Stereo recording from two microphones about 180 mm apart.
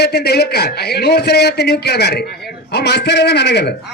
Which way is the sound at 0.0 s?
65° left (ahead or behind).